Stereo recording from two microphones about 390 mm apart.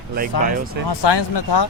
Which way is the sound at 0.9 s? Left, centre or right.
Left.